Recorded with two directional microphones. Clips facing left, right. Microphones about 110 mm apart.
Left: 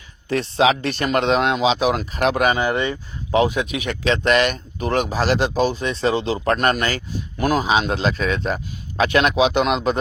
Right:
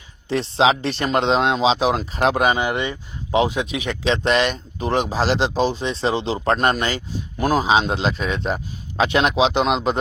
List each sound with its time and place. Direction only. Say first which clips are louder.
0.3 s speech: even; 25° right (ahead or behind)